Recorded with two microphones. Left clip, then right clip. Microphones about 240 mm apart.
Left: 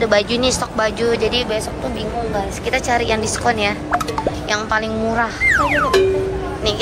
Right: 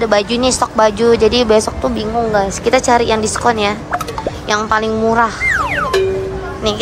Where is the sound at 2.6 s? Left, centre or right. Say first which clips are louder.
Right 5 dB; centre.